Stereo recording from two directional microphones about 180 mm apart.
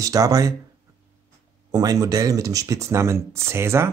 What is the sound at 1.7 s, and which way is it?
Speech, 20° right (ahead or behind).